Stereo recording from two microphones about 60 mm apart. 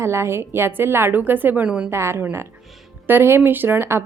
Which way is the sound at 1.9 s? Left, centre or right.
Right.